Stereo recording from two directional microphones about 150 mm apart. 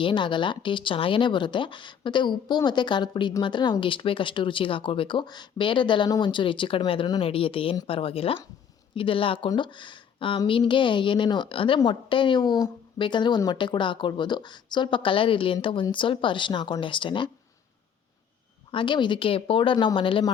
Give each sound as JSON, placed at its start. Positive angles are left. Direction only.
{"t": 0.0, "sound": "speech", "side_deg": 30}
{"t": 18.7, "sound": "speech", "side_deg": 35}